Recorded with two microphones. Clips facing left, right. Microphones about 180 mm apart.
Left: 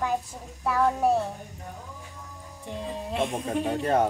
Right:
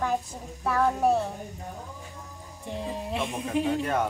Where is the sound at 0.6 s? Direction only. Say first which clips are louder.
Even; 5° left (ahead or behind).